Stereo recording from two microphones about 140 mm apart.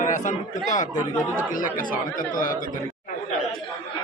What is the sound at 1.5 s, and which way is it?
Speech, 75° left (ahead or behind).